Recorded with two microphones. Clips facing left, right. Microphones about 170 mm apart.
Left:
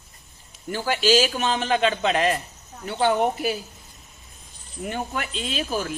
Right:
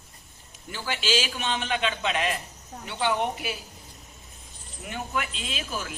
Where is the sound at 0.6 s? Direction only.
45° left (ahead or behind).